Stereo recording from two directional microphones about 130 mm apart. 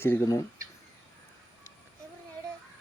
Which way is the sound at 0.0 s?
20° left (ahead or behind).